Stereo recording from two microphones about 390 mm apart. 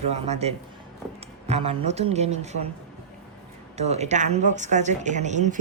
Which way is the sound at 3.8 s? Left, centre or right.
Centre.